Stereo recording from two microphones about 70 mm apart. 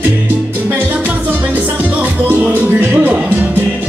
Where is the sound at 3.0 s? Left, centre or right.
Centre.